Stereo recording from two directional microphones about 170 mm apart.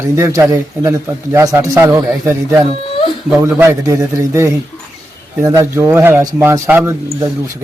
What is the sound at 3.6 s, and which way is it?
A man's voice, 15° right (ahead or behind).